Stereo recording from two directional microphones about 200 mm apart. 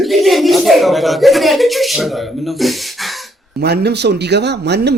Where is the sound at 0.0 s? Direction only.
Centre (ahead or behind).